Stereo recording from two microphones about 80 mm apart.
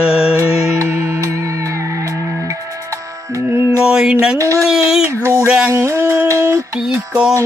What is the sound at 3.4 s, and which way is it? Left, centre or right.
Music, right.